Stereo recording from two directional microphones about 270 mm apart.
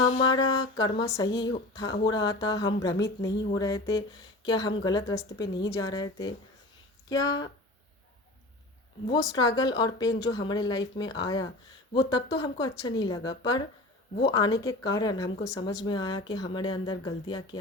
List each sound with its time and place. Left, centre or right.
0.0 s speech: centre
9.3 s speech: centre